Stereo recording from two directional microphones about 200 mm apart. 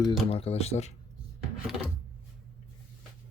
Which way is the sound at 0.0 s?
30° left (ahead or behind).